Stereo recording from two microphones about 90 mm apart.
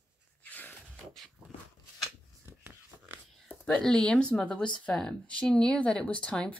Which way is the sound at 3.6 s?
5° left (ahead or behind).